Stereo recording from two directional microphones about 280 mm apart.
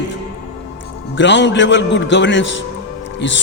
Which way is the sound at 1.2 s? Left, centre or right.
Left.